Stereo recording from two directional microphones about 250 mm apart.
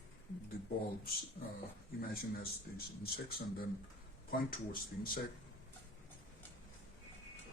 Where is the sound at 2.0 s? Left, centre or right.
Left.